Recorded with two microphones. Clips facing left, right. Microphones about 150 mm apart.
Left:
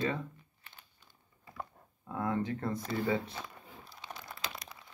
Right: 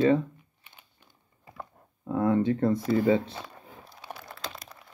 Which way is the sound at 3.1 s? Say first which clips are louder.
Right 9 dB; 30° right (ahead or behind).